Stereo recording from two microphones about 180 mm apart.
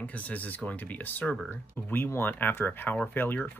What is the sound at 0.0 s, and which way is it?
Speech, 10° left (ahead or behind).